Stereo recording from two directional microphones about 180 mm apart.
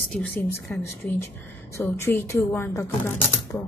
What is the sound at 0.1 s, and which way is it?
A woman's voice, 10° left (ahead or behind).